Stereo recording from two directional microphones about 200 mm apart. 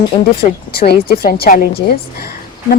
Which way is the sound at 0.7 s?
50° left (ahead or behind).